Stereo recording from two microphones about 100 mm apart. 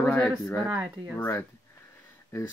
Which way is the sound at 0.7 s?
15° right (ahead or behind).